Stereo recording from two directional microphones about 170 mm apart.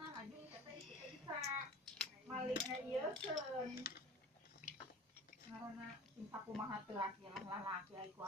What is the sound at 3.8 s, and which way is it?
Speech, 65° left (ahead or behind).